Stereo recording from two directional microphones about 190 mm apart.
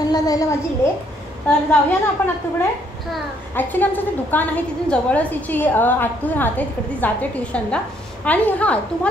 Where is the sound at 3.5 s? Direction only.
10° left (ahead or behind).